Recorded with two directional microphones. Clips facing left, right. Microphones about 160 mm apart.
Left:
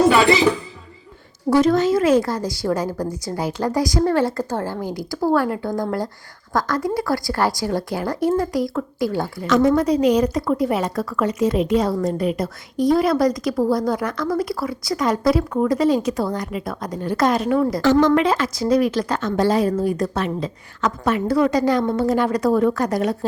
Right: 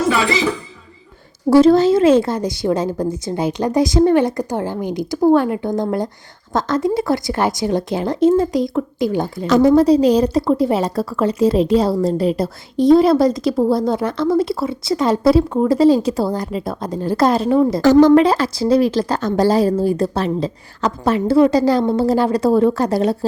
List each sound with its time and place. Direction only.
1.5 s a woman's voice: 30° right (ahead or behind)
9.5 s a woman's voice: 30° right (ahead or behind)
17.8 s speech: 35° right (ahead or behind)